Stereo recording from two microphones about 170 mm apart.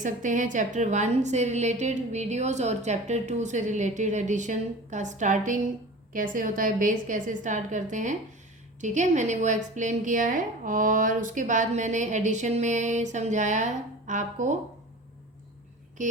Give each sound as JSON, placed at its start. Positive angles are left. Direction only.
{"t": 0.0, "sound": "a woman's voice", "side_deg": -50}